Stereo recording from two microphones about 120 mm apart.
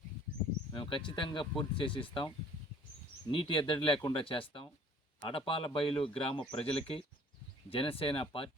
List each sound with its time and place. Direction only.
0.7 s speech: 40° left (ahead or behind)
3.3 s speech: 45° left (ahead or behind)